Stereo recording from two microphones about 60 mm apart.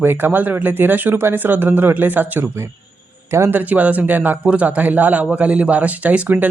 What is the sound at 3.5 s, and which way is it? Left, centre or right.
A man's voice, right.